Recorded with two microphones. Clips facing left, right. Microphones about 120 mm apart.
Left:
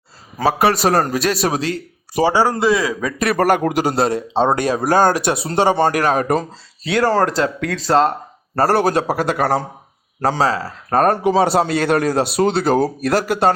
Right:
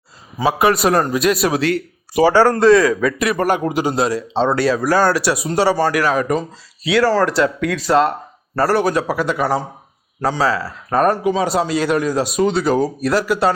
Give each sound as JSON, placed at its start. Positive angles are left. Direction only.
{"t": 0.3, "sound": "a man's voice", "side_deg": 35}
{"t": 2.2, "sound": "speech", "side_deg": 10}
{"t": 3.2, "sound": "speech", "side_deg": 45}
{"t": 4.4, "sound": "speech", "side_deg": 15}
{"t": 5.9, "sound": "a man's voice", "side_deg": 50}
{"t": 9.3, "sound": "speech", "side_deg": 50}
{"t": 11.3, "sound": "speech", "side_deg": 65}